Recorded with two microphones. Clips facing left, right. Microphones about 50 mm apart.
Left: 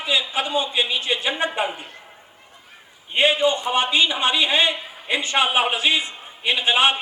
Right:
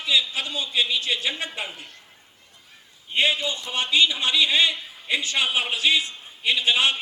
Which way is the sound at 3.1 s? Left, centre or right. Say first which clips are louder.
Left 5 dB; left.